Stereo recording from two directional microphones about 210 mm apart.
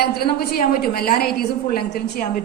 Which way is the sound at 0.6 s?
45° left (ahead or behind).